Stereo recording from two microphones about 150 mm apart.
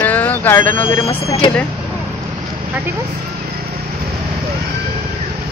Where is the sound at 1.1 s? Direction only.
35° left (ahead or behind).